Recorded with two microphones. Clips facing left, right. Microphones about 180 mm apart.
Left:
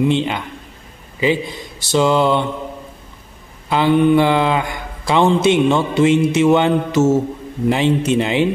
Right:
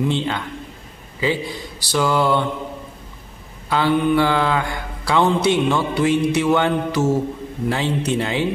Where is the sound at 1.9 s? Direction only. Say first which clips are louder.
Left 4 dB; 20° left (ahead or behind).